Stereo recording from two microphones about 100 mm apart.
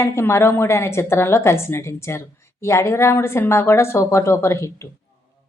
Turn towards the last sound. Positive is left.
turn(degrees=30)  # may be behind; listen again after turning